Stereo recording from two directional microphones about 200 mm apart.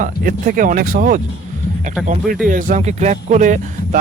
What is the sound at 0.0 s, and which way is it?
Speech, 45° right (ahead or behind).